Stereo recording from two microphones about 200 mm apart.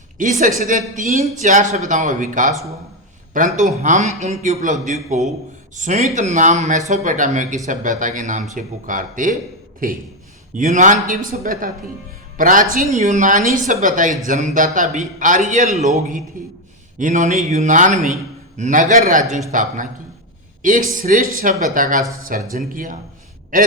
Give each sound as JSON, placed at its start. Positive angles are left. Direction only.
{"t": 0.2, "sound": "a man's voice", "side_deg": -40}